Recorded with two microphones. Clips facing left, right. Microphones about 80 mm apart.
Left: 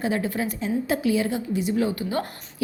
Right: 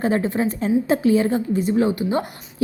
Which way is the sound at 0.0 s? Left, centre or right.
Right.